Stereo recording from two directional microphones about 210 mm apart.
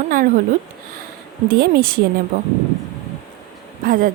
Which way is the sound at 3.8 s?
40° right (ahead or behind).